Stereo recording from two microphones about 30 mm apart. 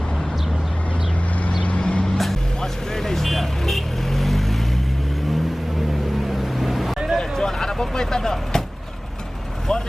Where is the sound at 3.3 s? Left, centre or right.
Centre.